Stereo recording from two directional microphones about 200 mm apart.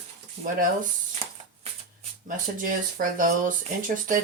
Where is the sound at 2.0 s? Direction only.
40° right (ahead or behind).